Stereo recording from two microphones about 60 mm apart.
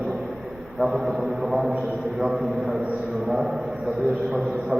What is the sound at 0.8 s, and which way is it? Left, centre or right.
A man's voice, centre.